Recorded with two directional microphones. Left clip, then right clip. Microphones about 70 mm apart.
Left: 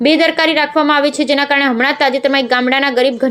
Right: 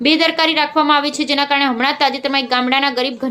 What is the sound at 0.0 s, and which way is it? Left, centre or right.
A woman's voice, left.